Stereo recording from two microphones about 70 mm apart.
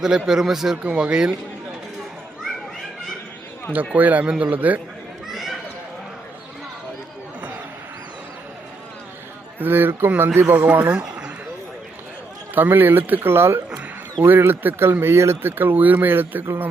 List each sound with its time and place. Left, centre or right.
0.0 s speech: centre
3.7 s speech: right
5.3 s a sound: centre
9.6 s speech: right
12.5 s speech: right